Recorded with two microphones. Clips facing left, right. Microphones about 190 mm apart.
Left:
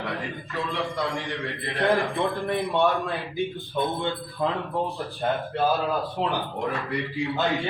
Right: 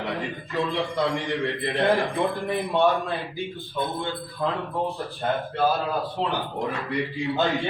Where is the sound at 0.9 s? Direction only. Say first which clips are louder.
Right 4 dB; 20° right (ahead or behind).